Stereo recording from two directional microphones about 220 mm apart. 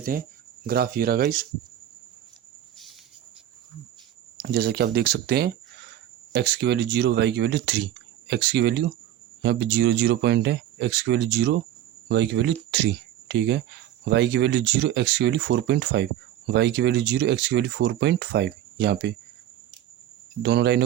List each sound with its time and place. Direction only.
0.0 s speech: 40° right (ahead or behind)
4.4 s speech: 45° right (ahead or behind)
20.4 s speech: 50° right (ahead or behind)